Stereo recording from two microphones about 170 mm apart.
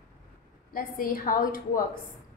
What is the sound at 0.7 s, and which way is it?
A woman's voice, 60° left (ahead or behind).